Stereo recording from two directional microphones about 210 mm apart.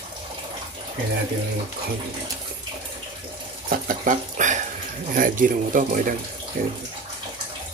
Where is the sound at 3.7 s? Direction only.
40° right (ahead or behind).